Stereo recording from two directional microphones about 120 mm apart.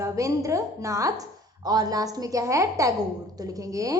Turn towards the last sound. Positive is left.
turn(degrees=-30)  # may be behind; listen again after turning